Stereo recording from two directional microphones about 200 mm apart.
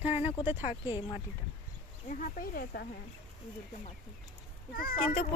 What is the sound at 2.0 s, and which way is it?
Speech, 40° left (ahead or behind).